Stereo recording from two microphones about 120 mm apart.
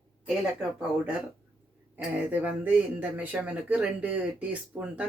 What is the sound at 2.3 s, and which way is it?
Speech, 15° right (ahead or behind).